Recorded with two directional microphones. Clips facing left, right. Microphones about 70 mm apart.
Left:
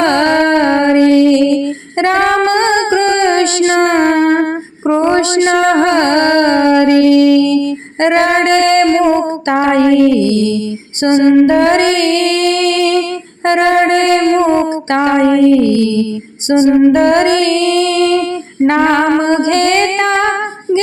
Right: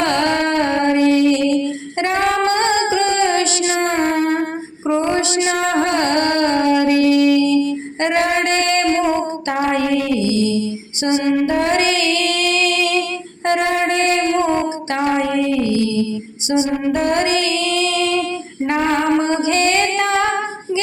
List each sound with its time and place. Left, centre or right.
0.0 s music: left
4.9 s a sound: left
8.0 s female singing: left
9.1 s music: left
18.7 s female singing: left